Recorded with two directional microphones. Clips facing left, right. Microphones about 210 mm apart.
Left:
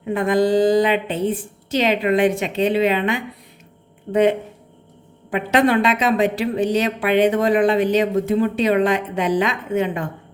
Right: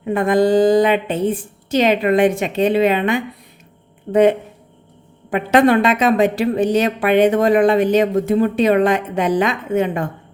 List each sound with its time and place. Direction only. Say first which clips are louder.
0.0 s a woman's voice: right 3 dB; 50° right (ahead or behind)